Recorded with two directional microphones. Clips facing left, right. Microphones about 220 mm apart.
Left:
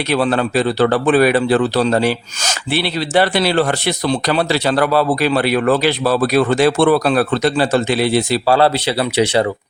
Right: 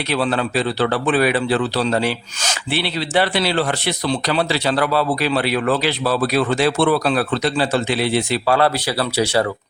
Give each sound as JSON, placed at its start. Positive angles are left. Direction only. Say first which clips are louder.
{"t": 0.1, "sound": "speech", "louder": "left 4 dB", "side_deg": 50}